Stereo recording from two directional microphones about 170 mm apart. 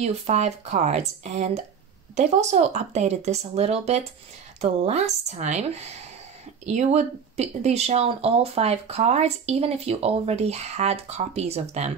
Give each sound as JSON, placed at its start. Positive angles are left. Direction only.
{"t": 0.0, "sound": "speech", "side_deg": -40}